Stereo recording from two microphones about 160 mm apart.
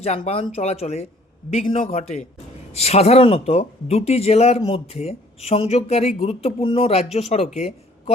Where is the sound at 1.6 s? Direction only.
55° left (ahead or behind).